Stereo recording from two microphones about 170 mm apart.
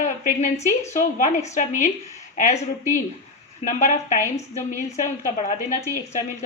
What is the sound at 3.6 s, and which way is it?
A woman's voice, 45° left (ahead or behind).